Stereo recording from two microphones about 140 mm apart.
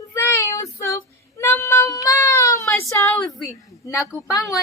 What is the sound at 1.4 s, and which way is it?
Child singing, 15° left (ahead or behind).